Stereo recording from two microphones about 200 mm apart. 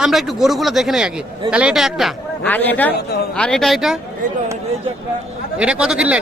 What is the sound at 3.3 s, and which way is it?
Speech, 5° left (ahead or behind).